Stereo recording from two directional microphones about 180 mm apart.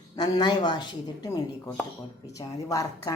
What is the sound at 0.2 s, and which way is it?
A woman's voice, 20° left (ahead or behind).